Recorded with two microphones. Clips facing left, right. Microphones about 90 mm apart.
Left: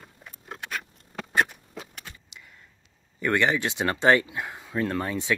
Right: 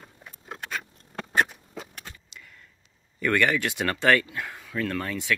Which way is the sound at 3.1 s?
20° left (ahead or behind).